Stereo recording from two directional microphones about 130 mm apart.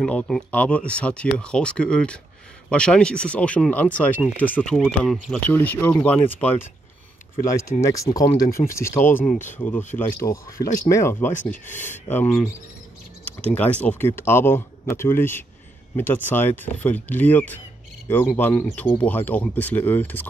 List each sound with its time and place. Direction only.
0.0 s speech: 5° left (ahead or behind)
5.5 s speech: 15° left (ahead or behind)
7.4 s speech: 25° left (ahead or behind)